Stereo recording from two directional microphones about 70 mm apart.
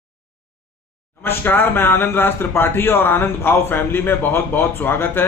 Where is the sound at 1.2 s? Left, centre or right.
Left.